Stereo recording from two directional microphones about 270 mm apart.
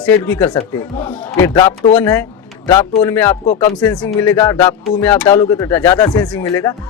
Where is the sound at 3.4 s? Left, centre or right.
Left.